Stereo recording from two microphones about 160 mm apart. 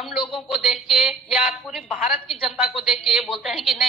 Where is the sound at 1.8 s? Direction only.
35° left (ahead or behind).